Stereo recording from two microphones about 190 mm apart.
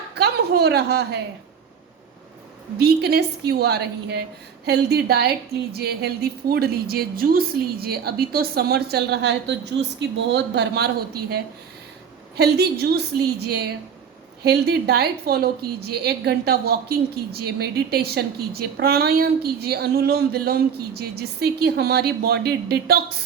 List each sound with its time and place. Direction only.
0.1 s a woman's voice: 60° right (ahead or behind)
2.7 s a woman's voice: 60° right (ahead or behind)